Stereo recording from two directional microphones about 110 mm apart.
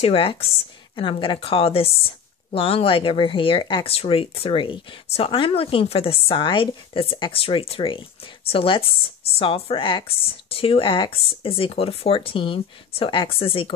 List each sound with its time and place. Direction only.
0.0 s speech: 55° left (ahead or behind)